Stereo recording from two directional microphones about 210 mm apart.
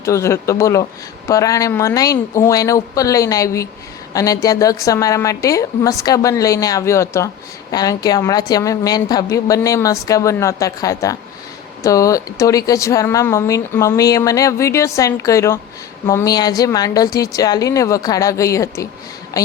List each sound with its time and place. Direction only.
0.0 s a woman's voice: 15° left (ahead or behind)